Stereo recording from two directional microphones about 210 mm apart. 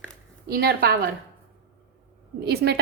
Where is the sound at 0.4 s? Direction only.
50° right (ahead or behind).